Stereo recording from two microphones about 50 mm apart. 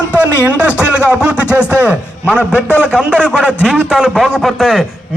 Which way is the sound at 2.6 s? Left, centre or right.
Left.